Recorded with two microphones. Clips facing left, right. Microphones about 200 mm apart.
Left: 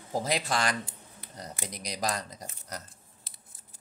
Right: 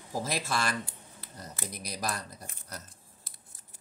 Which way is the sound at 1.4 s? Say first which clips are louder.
Left 2 dB; 15° left (ahead or behind).